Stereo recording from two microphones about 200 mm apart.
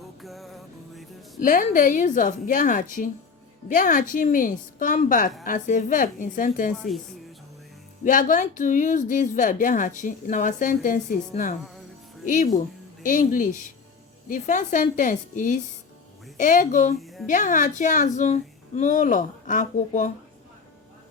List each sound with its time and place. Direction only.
0.2 s music: centre (ahead or behind)
1.4 s a woman's voice: 40° left (ahead or behind)
6.7 s a woman's voice: centre (ahead or behind)
8.0 s a woman's voice: 40° left (ahead or behind)
17.0 s a sound: centre (ahead or behind)
17.2 s a woman's voice: 40° left (ahead or behind)